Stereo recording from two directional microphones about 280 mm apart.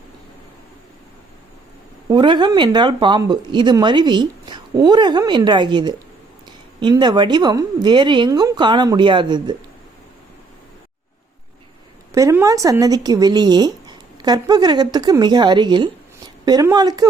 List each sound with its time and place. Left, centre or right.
2.0 s speech: centre
12.1 s speech: centre